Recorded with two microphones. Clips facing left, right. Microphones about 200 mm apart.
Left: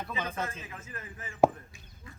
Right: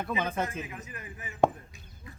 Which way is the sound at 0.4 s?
15° right (ahead or behind).